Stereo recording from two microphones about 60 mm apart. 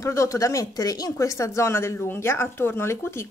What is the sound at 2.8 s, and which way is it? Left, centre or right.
Speech, left.